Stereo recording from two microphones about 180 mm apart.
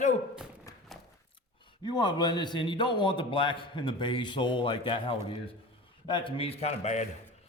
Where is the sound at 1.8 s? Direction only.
25° left (ahead or behind).